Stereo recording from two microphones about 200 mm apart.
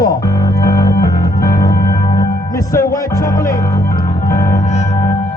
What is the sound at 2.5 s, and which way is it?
Speech, 15° left (ahead or behind).